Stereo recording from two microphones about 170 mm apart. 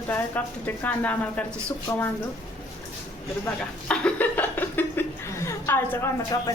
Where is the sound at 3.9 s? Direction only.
10° left (ahead or behind).